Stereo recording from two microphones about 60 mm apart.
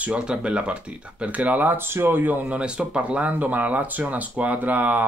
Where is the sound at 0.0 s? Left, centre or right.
Centre.